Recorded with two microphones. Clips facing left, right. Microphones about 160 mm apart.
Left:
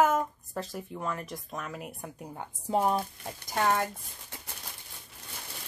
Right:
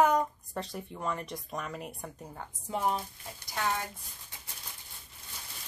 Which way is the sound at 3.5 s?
55° left (ahead or behind).